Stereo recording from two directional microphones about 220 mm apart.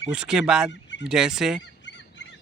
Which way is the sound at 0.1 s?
5° right (ahead or behind).